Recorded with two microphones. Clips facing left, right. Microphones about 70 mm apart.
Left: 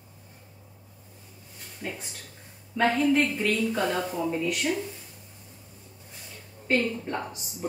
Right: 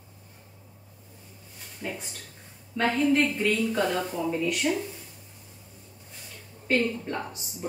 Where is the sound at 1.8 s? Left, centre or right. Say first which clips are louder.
Right 1 dB; centre.